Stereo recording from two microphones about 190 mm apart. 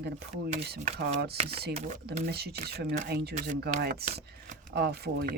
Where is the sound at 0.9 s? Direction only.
60° right (ahead or behind).